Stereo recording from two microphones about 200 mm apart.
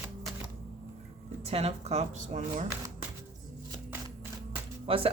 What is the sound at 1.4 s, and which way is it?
Speech, 30° right (ahead or behind).